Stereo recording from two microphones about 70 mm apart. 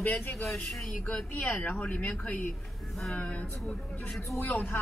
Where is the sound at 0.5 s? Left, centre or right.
Centre.